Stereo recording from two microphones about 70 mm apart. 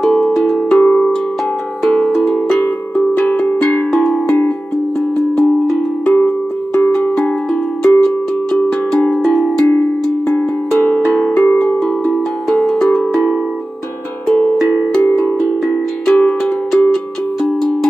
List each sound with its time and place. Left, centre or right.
0.0 s cowbell: centre
0.7 s cowbell: centre
2.0 s music: centre
2.3 s cowbell: centre
3.2 s music: centre
9.3 s cowbell: centre
11.1 s music: centre
14.3 s music: centre